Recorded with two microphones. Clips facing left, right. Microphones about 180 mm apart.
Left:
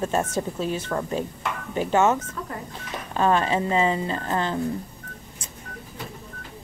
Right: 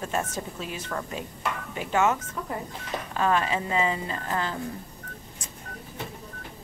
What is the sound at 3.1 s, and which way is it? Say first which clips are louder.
Speech: left 4 dB; 30° left (ahead or behind).